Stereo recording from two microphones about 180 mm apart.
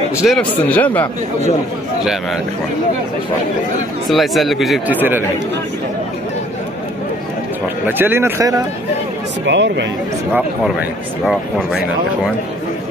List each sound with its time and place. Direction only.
0.2 s a man's voice: 5° left (ahead or behind)
4.1 s speech: centre (ahead or behind)
7.8 s speech: 10° right (ahead or behind)
9.5 s speech: 85° right
11.2 s speech: centre (ahead or behind)